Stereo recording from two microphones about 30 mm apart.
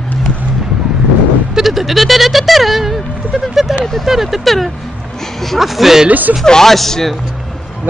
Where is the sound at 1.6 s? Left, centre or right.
Centre.